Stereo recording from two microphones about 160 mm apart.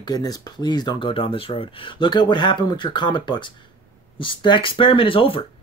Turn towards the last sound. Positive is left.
turn(degrees=35)  # may be behind; listen again after turning